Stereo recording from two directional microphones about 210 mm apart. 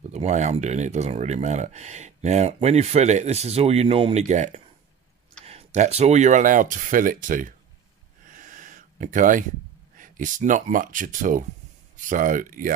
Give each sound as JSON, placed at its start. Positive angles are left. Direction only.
{"t": 0.1, "sound": "speech", "side_deg": -35}
{"t": 8.3, "sound": "a sound", "side_deg": -40}
{"t": 9.9, "sound": "speech", "side_deg": -40}